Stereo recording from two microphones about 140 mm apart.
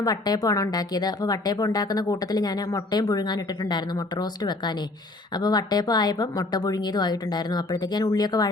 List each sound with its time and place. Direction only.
0.0 s speech: 25° left (ahead or behind)